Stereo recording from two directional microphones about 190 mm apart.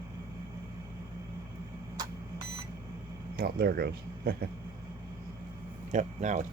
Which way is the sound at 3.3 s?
55° right (ahead or behind).